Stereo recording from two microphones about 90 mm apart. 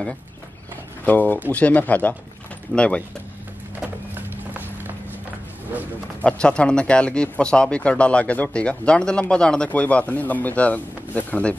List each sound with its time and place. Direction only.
1.0 s speech: 20° left (ahead or behind)
3.8 s music: 20° right (ahead or behind)
6.2 s speech: 10° left (ahead or behind)